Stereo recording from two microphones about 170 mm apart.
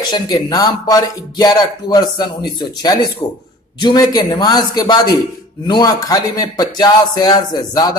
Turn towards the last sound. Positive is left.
turn(degrees=25)  # may be behind; listen again after turning